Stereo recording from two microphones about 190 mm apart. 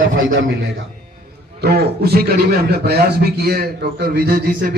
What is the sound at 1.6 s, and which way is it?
A man's voice, 55° right (ahead or behind).